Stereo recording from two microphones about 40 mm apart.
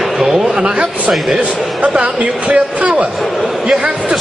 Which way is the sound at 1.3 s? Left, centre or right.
Right.